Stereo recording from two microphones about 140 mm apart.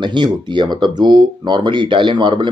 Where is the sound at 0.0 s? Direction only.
35° right (ahead or behind).